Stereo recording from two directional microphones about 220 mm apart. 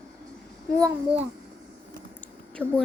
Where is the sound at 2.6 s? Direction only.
10° right (ahead or behind).